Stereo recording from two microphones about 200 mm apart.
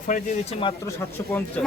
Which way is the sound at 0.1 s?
40° left (ahead or behind).